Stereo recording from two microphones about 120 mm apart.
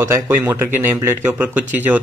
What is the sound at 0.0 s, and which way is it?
Speech, 20° right (ahead or behind).